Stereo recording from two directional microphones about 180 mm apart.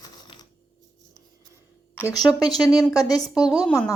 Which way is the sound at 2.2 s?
20° left (ahead or behind).